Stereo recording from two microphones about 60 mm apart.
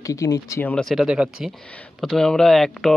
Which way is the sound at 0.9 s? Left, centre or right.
Centre.